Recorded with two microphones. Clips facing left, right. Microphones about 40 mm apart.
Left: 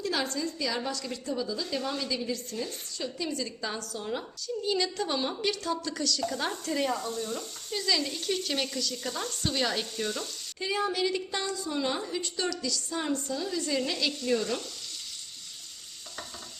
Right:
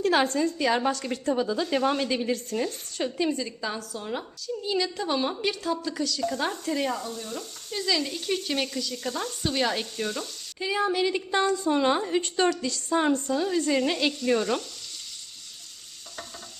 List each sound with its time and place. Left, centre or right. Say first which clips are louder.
0.0 s a woman's voice: right 8 dB; right
3.2 s speech: right 5 dB; right
3.6 s a woman's voice: right 2 dB; centre; by 14.1 s right